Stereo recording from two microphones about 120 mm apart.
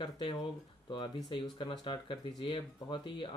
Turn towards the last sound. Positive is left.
turn(degrees=45)  # may be behind; listen again after turning